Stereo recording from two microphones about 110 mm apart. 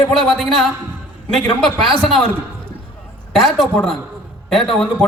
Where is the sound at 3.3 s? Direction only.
Centre (ahead or behind).